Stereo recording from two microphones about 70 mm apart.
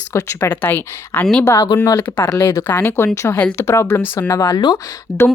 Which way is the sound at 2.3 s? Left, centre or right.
Left.